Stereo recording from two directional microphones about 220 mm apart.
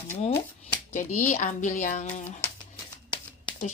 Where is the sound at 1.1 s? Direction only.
35° left (ahead or behind).